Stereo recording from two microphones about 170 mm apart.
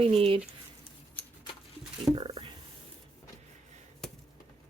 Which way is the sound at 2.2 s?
30° right (ahead or behind).